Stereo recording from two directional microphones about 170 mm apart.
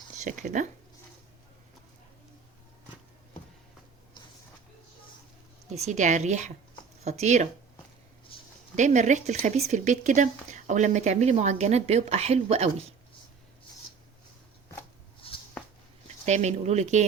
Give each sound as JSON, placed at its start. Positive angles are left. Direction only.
{"t": 0.2, "sound": "speech", "side_deg": -45}
{"t": 5.7, "sound": "speech", "side_deg": -40}
{"t": 8.3, "sound": "a sound", "side_deg": 30}
{"t": 8.7, "sound": "speech", "side_deg": -45}
{"t": 15.2, "sound": "a sound", "side_deg": 35}
{"t": 16.0, "sound": "speech", "side_deg": -40}